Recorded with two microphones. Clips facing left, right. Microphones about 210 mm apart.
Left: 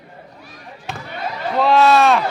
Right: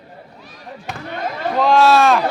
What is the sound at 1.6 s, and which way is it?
Speech, centre (ahead or behind).